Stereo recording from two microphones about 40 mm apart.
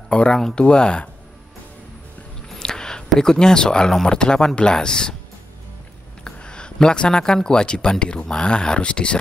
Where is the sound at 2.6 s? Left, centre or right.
Centre.